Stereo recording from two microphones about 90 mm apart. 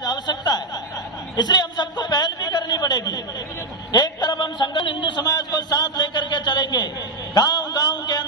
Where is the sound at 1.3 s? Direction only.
55° left (ahead or behind).